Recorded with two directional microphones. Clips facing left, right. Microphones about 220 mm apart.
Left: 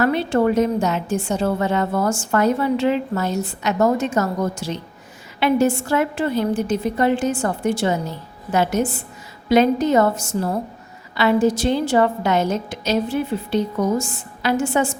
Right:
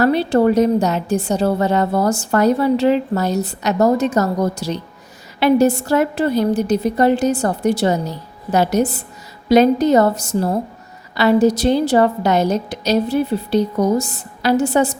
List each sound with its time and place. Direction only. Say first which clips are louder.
0.0 s a woman's voice: right 4 dB; 35° right (ahead or behind)